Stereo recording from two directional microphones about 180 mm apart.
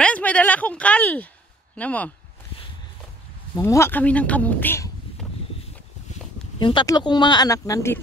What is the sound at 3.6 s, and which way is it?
Speech, 15° left (ahead or behind).